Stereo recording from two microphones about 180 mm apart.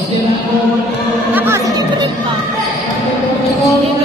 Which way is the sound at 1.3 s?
10° right (ahead or behind).